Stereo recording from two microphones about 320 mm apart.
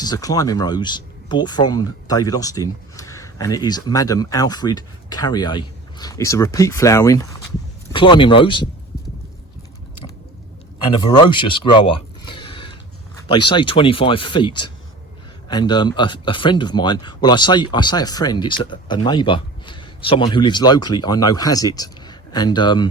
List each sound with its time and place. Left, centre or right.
0.0 s speech: centre
10.9 s speech: centre